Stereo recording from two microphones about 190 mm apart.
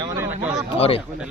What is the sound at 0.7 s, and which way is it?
Speech, 30° left (ahead or behind).